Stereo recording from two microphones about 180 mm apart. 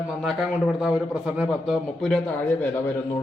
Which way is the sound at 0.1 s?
Centre (ahead or behind).